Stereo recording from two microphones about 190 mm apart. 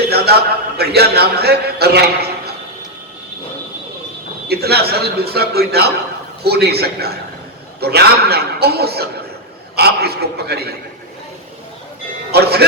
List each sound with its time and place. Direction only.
0.1 s a sound: 55° right (ahead or behind)
0.8 s a man's voice: 55° right (ahead or behind)
4.4 s a man's voice: 55° right (ahead or behind)
12.3 s a man's voice: 55° right (ahead or behind)